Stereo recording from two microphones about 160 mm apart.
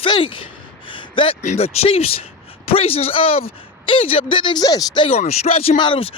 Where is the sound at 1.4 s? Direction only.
45° left (ahead or behind); by 5.0 s 25° left (ahead or behind).